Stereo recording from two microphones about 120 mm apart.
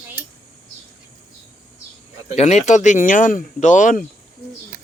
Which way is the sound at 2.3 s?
65° left (ahead or behind).